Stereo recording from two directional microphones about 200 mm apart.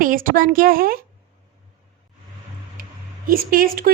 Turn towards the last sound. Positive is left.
turn(degrees=-45)  # may be behind; listen again after turning